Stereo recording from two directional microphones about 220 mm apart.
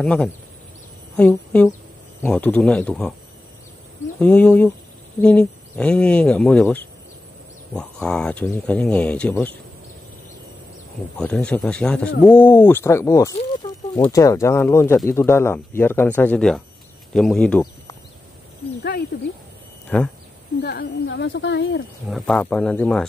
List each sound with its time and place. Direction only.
0.0 s a woman's voice: 5° left (ahead or behind)
4.2 s speech: 5° left (ahead or behind)
11.1 s speech: 5° left (ahead or behind)
18.8 s speech: 45° left (ahead or behind)
19.9 s speech: 5° left (ahead or behind)
20.6 s a woman's voice: 50° left (ahead or behind)
22.0 s speech: centre (ahead or behind)